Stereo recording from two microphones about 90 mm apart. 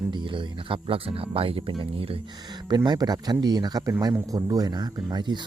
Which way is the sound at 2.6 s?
50° right (ahead or behind).